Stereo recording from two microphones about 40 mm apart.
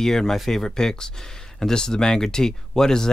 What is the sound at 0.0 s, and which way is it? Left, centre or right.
Speech, centre.